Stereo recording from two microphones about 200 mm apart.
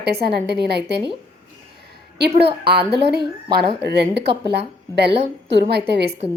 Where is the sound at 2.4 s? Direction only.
55° right (ahead or behind).